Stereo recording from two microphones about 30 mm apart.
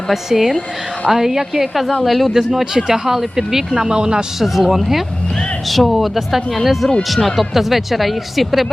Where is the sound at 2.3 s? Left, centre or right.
Centre.